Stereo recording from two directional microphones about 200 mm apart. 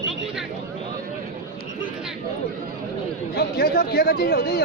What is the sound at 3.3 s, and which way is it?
Speech, 50° left (ahead or behind).